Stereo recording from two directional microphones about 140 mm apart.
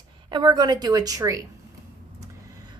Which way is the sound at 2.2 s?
30° right (ahead or behind).